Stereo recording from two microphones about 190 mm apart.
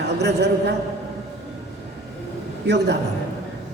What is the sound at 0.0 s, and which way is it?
Speech, 60° right (ahead or behind).